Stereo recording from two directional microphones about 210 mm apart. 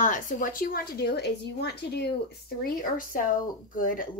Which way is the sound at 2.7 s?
40° left (ahead or behind).